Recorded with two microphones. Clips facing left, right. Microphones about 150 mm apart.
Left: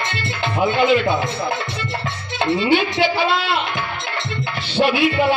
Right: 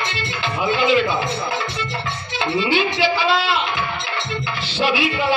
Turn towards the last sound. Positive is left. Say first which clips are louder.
# left 3 dB
turn(degrees=55)  # may be behind; listen again after turning